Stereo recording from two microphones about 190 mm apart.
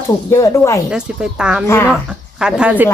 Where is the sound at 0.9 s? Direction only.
5° right (ahead or behind).